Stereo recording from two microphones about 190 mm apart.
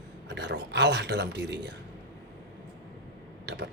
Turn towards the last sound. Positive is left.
turn(degrees=-60)  # may be behind; listen again after turning